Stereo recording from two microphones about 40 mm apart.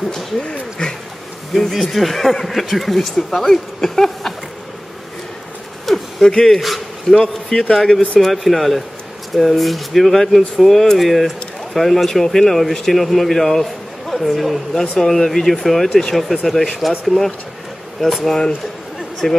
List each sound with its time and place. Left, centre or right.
0.4 s speech: centre
1.5 s speech: centre
5.9 s a sound: centre
6.2 s speech: centre
19.2 s speech: centre